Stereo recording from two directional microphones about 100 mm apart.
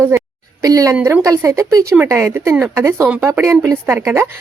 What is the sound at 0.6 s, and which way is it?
A woman's voice, 35° right (ahead or behind).